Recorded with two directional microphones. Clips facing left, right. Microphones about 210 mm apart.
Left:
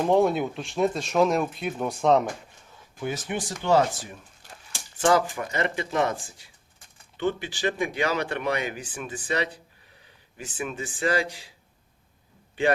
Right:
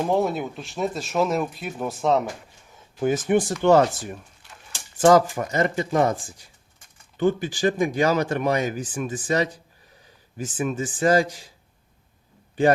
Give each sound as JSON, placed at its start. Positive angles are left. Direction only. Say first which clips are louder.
{"t": 0.1, "sound": "speech", "louder": "left 2 dB", "side_deg": 0}
{"t": 3.0, "sound": "speech", "louder": "right 10 dB", "side_deg": -45}
{"t": 4.4, "sound": "a sound", "louder": "left 1 dB", "side_deg": 45}
{"t": 4.9, "sound": "speech", "louder": "right 6 dB", "side_deg": -40}